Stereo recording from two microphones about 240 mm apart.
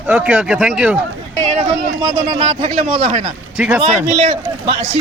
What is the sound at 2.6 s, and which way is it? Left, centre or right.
Speech, right.